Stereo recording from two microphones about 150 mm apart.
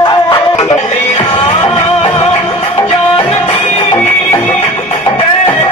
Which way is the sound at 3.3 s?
35° left (ahead or behind).